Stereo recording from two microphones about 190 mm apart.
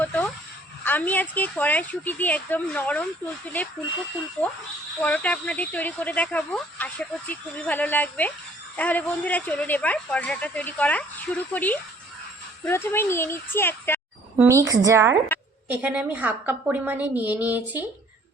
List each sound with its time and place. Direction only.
0.0 s a sound: 10° left (ahead or behind)
0.9 s speech: 10° left (ahead or behind)
4.4 s speech: 10° left (ahead or behind)
14.3 s a woman's voice: 15° right (ahead or behind)